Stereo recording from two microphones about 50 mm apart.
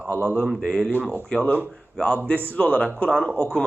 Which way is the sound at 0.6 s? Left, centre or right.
Centre.